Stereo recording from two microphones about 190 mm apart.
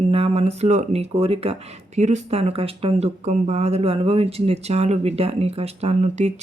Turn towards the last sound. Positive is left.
turn(degrees=-35)  # may be behind; listen again after turning